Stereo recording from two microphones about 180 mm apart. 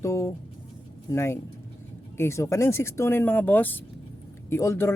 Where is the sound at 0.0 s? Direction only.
15° left (ahead or behind).